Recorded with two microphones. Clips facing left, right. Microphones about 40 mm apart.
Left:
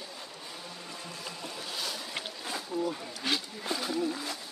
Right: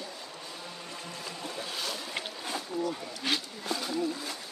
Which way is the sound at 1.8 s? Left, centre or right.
Centre.